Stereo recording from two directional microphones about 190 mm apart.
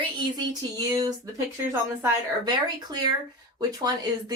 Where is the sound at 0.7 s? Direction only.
20° right (ahead or behind).